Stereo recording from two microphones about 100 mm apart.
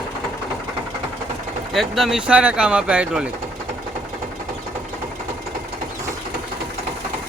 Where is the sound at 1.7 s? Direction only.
Centre (ahead or behind).